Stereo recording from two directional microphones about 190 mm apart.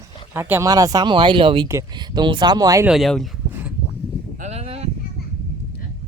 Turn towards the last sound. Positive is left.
turn(degrees=-35)  # may be behind; listen again after turning